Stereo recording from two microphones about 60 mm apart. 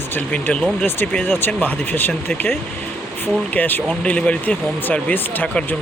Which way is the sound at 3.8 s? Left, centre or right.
Left.